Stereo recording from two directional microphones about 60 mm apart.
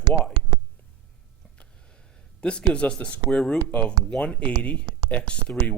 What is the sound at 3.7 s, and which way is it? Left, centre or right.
Speech, left.